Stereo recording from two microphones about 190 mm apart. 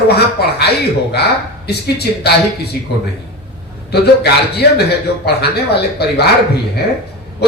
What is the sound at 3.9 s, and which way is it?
Speech, 60° left (ahead or behind).